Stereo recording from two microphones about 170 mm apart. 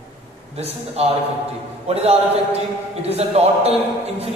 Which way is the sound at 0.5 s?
35° right (ahead or behind).